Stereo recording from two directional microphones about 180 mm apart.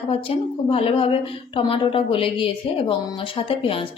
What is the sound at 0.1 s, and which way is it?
A woman's voice, 30° left (ahead or behind).